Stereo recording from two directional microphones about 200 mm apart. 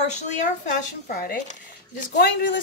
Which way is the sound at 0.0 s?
35° left (ahead or behind).